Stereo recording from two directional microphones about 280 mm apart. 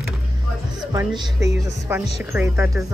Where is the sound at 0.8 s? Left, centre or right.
Centre.